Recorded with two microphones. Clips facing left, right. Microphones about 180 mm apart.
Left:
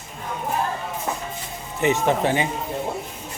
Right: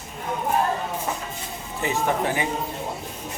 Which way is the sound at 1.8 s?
25° left (ahead or behind).